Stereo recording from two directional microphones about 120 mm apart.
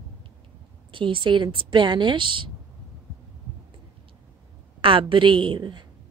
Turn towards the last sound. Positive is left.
turn(degrees=-40)  # may be behind; listen again after turning